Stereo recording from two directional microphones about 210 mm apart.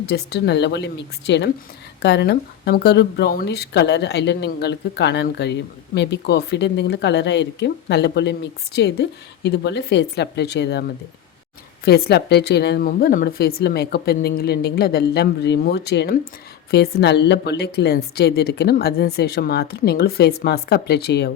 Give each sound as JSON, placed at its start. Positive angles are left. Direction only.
{"t": 0.0, "sound": "speech", "side_deg": 50}
{"t": 11.9, "sound": "speech", "side_deg": 50}